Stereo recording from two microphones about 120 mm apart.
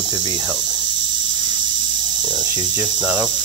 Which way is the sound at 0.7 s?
40° right (ahead or behind).